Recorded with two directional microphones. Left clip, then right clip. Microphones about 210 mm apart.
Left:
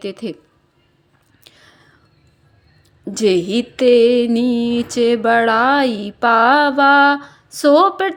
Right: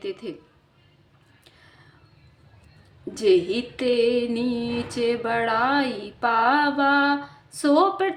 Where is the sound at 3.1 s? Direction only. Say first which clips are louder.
Left 4 dB; 40° left (ahead or behind).